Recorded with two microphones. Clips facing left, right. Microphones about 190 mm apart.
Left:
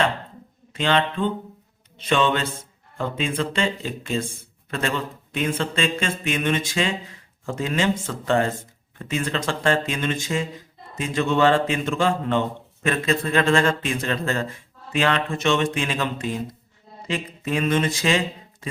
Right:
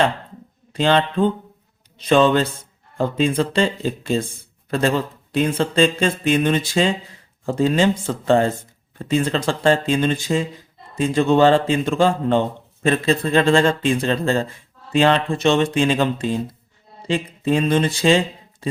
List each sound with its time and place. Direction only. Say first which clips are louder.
0.7 s a man's voice: right 4 dB; 35° right (ahead or behind)